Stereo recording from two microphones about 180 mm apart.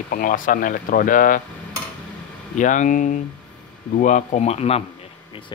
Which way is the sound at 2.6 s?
45° left (ahead or behind).